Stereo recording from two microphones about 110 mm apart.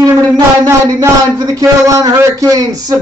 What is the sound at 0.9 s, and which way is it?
A man's voice, 30° right (ahead or behind).